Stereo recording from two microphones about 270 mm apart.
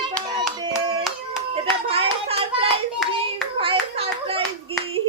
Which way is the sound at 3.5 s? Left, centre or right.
Centre.